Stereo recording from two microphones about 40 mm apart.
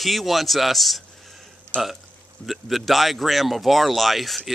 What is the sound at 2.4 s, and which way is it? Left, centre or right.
Speech, centre.